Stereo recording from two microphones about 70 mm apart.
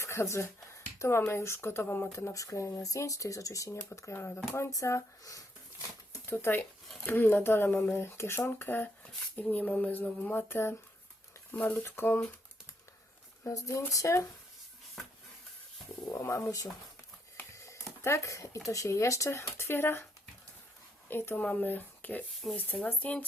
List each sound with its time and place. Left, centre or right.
0.0 s a sound: left
1.3 s speech: left
2.1 s speech: left
6.2 s speech: left
13.5 s speech: left
16.1 s speech: left
17.5 s a sound: left
18.0 s speech: left
21.1 s speech: left